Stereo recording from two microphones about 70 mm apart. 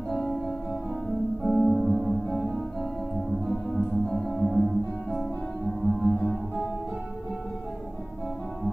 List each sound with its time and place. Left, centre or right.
1.4 s music: centre
3.4 s music: centre